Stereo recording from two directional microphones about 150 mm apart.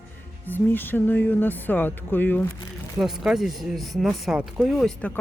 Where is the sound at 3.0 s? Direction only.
5° right (ahead or behind).